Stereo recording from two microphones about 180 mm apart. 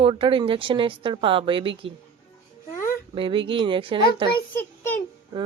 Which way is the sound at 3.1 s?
30° right (ahead or behind).